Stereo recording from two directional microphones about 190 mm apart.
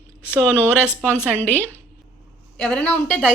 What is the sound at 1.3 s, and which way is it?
A woman's voice, 10° left (ahead or behind).